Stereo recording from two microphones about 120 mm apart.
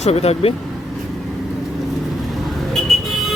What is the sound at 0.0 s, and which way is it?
Speech, 60° left (ahead or behind).